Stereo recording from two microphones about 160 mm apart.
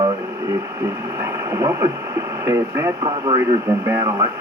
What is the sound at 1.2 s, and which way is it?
Speech, 20° right (ahead or behind).